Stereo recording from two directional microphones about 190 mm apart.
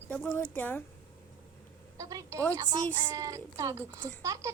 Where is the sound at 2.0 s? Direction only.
15° right (ahead or behind).